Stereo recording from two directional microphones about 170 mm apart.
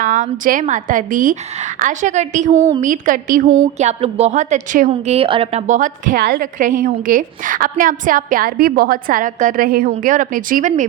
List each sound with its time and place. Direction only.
0.0 s a woman's voice: 50° right (ahead or behind)
4.9 s a woman's voice: 35° right (ahead or behind)